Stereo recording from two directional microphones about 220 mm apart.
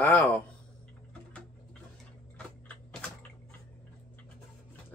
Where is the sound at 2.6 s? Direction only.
5° left (ahead or behind).